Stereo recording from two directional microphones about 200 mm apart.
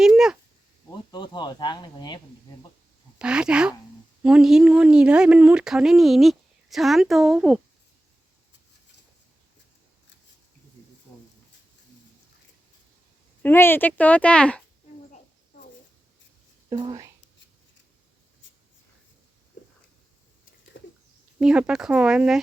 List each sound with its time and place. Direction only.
0.0 s a sound: 5° right (ahead or behind)
0.9 s speech: 20° left (ahead or behind)
3.2 s speech: 5° right (ahead or behind)
13.4 s speech: 10° left (ahead or behind)
16.6 s speech: 20° right (ahead or behind)
20.7 s bird: 70° left (ahead or behind)
21.3 s speech: 5° right (ahead or behind)